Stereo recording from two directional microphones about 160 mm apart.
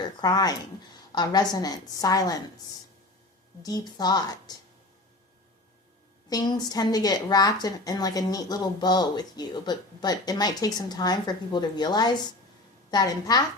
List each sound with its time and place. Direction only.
0.2 s a woman's voice: 25° left (ahead or behind)
3.6 s a woman's voice: 25° left (ahead or behind)
6.3 s a woman's voice: 25° left (ahead or behind)